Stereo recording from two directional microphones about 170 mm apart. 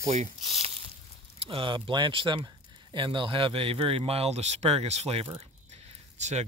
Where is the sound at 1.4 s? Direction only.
30° right (ahead or behind).